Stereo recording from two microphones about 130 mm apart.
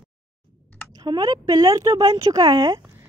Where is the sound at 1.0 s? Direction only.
30° right (ahead or behind).